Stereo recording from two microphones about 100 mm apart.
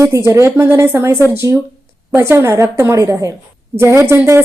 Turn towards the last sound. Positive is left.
turn(degrees=-20)  # may be behind; listen again after turning